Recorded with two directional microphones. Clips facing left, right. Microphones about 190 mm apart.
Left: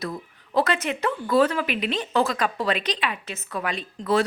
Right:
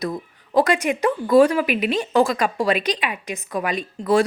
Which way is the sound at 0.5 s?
15° right (ahead or behind).